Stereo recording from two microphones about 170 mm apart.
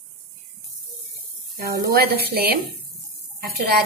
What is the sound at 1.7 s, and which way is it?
A woman's voice, 65° right (ahead or behind).